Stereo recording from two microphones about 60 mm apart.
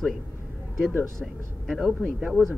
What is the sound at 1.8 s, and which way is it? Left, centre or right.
Speech, centre.